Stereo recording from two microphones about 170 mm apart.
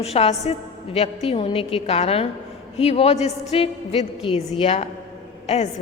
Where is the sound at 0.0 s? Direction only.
35° left (ahead or behind).